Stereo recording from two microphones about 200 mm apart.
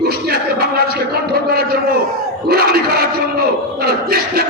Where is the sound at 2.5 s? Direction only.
50° right (ahead or behind).